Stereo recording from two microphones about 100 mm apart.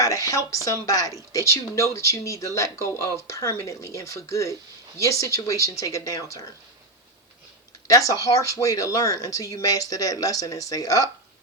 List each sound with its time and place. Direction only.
0.0 s speech: 35° left (ahead or behind)
7.9 s speech: 35° left (ahead or behind)